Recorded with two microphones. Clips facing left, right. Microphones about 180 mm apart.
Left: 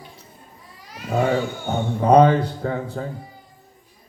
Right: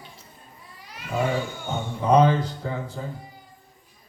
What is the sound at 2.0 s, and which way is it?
Speech, 60° left (ahead or behind).